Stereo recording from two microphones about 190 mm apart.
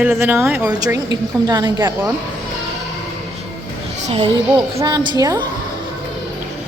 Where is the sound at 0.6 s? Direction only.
20° right (ahead or behind).